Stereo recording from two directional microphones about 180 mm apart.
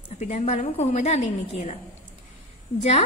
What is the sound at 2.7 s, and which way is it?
Speech, 40° left (ahead or behind).